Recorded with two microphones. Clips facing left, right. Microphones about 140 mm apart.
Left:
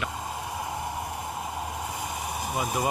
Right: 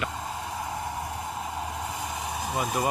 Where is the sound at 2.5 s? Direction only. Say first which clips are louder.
Right 1 dB; 10° left (ahead or behind).